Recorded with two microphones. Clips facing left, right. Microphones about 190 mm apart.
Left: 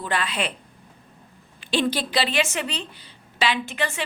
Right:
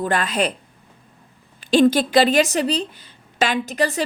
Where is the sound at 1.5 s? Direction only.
45° right (ahead or behind).